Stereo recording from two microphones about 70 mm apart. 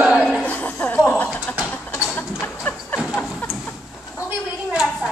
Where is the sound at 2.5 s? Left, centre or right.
Centre.